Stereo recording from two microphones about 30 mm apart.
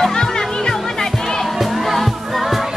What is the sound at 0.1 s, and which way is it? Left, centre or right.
Music, centre.